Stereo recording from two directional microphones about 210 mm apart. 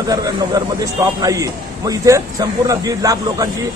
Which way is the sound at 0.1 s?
15° right (ahead or behind).